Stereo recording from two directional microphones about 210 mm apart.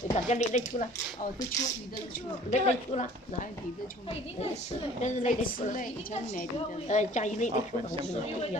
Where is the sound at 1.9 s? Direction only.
35° left (ahead or behind).